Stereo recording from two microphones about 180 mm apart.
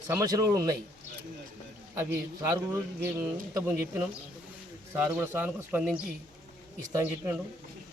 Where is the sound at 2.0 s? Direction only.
15° right (ahead or behind).